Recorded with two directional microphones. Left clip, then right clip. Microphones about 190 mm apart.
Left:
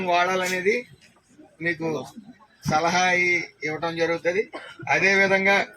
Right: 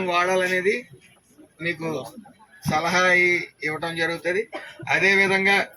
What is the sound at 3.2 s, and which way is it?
Speech, 55° right (ahead or behind).